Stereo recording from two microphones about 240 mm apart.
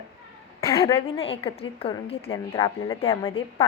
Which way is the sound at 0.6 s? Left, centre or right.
Centre.